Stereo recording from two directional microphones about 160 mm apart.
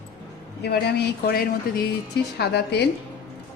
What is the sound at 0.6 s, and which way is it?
Speech, 90° left.